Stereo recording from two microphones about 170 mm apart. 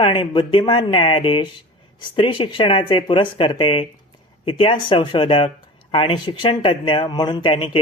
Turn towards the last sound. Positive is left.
turn(degrees=30)  # may be behind; listen again after turning